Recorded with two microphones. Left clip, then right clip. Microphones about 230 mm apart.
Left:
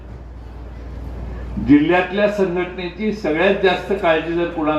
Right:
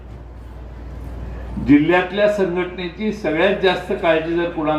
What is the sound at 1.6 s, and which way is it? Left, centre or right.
A man's voice, right.